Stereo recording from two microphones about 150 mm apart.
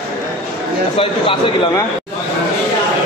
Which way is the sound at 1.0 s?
35° left (ahead or behind).